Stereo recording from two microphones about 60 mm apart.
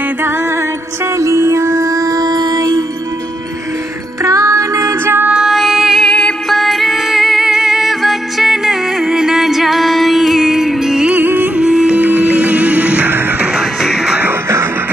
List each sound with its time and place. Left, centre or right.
1.1 s music: right
4.2 s music: right
5.5 s music: centre
6.0 s music: centre
6.5 s music: centre
11.1 s music: right
11.6 s music: centre
13.5 s music: centre